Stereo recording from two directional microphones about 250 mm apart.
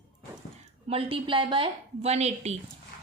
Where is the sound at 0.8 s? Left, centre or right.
Right.